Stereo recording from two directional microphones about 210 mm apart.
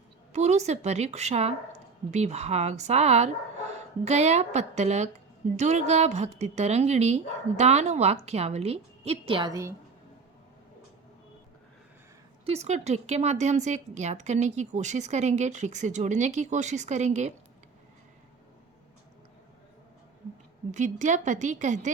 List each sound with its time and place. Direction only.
0.3 s speech: 30° right (ahead or behind); by 9.7 s 15° right (ahead or behind)
12.5 s speech: 30° right (ahead or behind)
20.7 s speech: 35° right (ahead or behind)